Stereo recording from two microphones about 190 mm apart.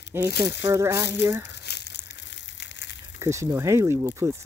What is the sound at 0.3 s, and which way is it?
Speech, 60° left (ahead or behind).